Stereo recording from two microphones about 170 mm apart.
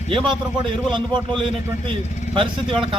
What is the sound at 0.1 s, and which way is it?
A man's voice, 30° right (ahead or behind).